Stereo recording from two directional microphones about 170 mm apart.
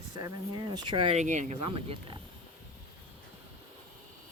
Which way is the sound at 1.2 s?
45° right (ahead or behind).